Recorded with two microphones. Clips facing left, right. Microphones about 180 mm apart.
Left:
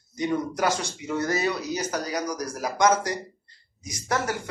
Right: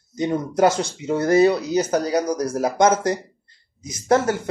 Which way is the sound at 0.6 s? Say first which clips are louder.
Right 8 dB; 25° right (ahead or behind).